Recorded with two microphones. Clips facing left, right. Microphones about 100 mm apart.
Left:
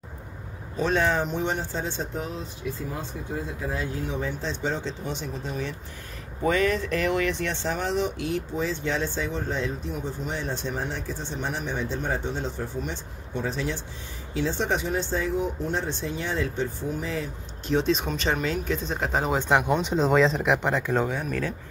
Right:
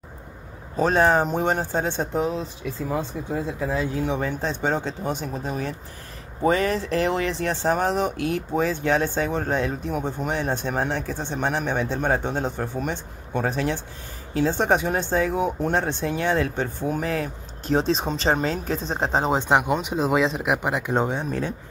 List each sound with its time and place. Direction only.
0.7 s speech: 40° right (ahead or behind); by 2.2 s 60° right (ahead or behind)
3.7 s speech: 80° right; by 5.8 s 45° right (ahead or behind)
6.4 s speech: 35° right (ahead or behind); by 17.3 s 60° right (ahead or behind)
17.6 s speech: 35° right (ahead or behind)
19.4 s speech: 15° right (ahead or behind)
20.9 s speech: 25° right (ahead or behind)